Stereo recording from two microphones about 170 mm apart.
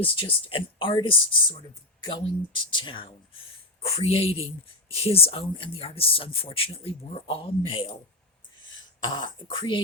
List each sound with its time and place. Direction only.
0.0 s speech: 30° left (ahead or behind)
9.1 s speech: 30° left (ahead or behind)